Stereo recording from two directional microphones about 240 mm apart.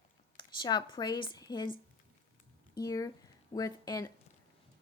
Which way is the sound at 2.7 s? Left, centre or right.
Centre.